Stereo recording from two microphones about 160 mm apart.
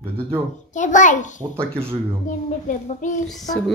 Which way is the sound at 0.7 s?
50° left (ahead or behind).